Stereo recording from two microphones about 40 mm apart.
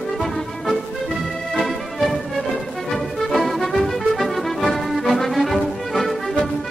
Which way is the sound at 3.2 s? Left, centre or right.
Centre.